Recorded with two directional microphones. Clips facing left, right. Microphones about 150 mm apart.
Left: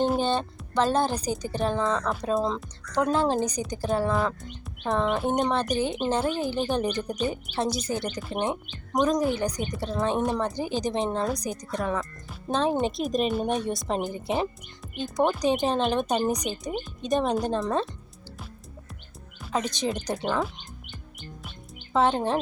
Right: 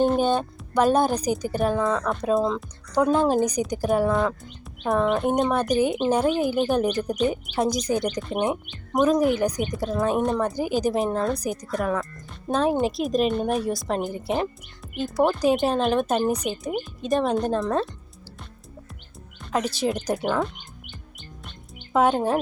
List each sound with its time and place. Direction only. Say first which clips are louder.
0.2 s a woman's voice: right 4 dB; 10° right (ahead or behind)
4.1 s a woman's voice: right 3 dB; centre (ahead or behind); by 8.1 s 15° right (ahead or behind)
8.1 s a woman's voice: right 4 dB; 5° left (ahead or behind)
10.5 s a woman's voice: right 4 dB; 10° right (ahead or behind)
19.4 s music: right 3 dB; 5° left (ahead or behind)
19.6 s a woman's voice: right 4 dB; 5° right (ahead or behind)
21.9 s a woman's voice: right 3 dB; 10° right (ahead or behind)